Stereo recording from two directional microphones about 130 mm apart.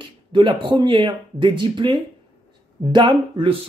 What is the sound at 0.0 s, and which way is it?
Speech, 40° right (ahead or behind).